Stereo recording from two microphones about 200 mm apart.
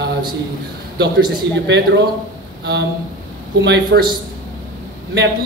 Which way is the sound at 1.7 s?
60° right (ahead or behind).